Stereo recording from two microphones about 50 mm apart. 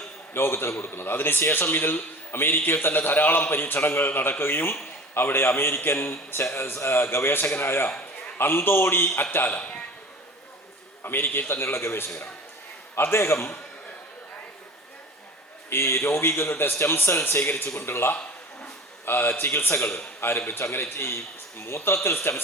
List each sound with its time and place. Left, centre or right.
0.3 s a man's voice: left
9.6 s a man's voice: left
11.0 s a man's voice: left
15.7 s a man's voice: left